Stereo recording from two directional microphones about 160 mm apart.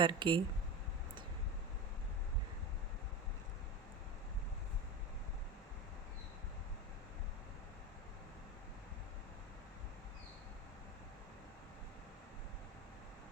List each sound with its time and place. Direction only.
0.0 s speech: 30° right (ahead or behind)